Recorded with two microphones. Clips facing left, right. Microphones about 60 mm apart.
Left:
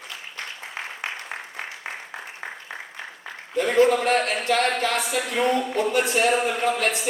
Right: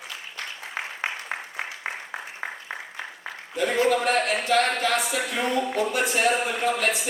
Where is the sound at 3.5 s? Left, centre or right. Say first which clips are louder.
Left 4 dB; left.